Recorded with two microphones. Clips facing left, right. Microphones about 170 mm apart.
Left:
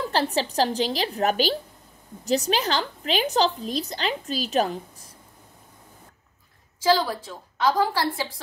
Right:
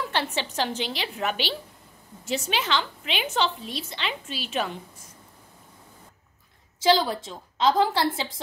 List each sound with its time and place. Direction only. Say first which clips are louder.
0.0 s a woman's voice: left 4 dB; 35° left (ahead or behind)
7.0 s a woman's voice: even; 20° right (ahead or behind)